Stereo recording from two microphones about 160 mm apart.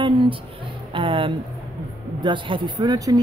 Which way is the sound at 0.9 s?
30° right (ahead or behind).